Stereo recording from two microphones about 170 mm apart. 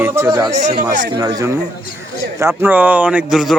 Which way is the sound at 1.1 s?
20° right (ahead or behind).